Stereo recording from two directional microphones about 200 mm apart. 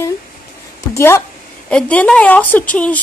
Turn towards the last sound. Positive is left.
turn(degrees=5)  # may be behind; listen again after turning